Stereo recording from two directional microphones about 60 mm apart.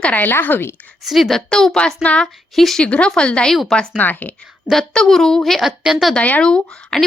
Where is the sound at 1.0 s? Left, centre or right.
Centre.